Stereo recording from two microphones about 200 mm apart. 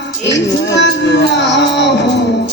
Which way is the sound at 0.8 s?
65° left (ahead or behind).